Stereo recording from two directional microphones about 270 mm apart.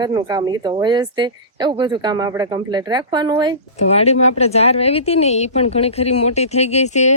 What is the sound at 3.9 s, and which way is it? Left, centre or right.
Speech, left.